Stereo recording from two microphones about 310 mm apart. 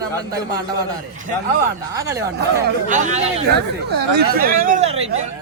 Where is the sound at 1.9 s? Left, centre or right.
Centre.